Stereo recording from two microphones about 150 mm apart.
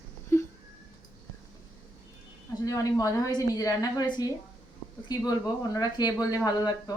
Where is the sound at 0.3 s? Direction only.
15° left (ahead or behind).